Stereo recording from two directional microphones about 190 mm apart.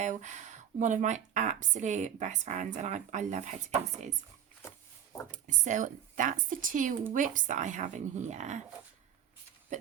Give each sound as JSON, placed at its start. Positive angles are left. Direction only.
{"t": 0.0, "sound": "a woman's voice", "side_deg": -40}
{"t": 5.5, "sound": "a woman's voice", "side_deg": -40}